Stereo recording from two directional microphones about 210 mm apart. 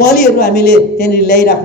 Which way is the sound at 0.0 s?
50° left (ahead or behind).